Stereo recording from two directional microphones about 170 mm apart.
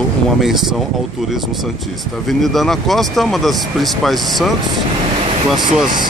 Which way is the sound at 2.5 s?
Centre (ahead or behind).